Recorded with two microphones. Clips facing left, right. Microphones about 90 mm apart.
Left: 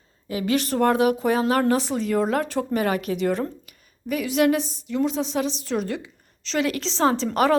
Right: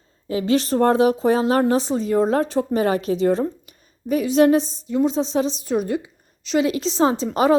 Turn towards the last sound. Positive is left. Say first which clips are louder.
# right 2 dB
turn(degrees=-15)  # may be behind; listen again after turning